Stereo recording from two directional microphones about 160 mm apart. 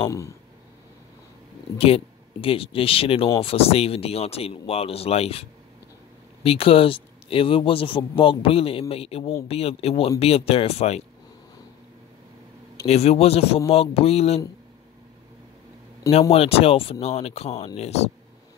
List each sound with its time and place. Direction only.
0.0 s speech: 20° left (ahead or behind)
1.8 s a man's voice: 35° left (ahead or behind)
12.8 s a man's voice: 40° left (ahead or behind)
16.1 s a man's voice: 40° left (ahead or behind)